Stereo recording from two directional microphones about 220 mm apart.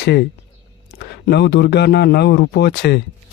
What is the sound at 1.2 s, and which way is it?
Speech, 50° left (ahead or behind).